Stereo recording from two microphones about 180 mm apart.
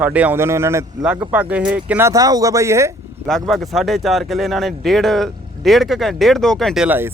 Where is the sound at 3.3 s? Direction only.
Centre (ahead or behind).